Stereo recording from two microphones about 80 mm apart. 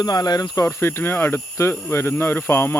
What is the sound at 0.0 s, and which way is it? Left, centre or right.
Speech, left.